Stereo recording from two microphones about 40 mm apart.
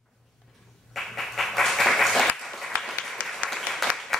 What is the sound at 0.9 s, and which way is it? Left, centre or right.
Applause, centre.